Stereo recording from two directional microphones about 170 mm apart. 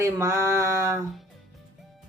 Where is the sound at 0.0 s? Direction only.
20° right (ahead or behind).